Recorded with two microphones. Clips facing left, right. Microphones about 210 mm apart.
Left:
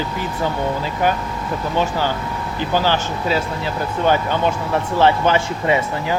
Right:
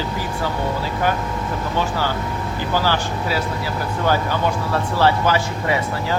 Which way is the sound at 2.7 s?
20° left (ahead or behind).